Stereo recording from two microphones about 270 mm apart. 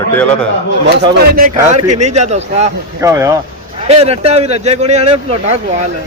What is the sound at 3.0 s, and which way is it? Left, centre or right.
Speech, centre.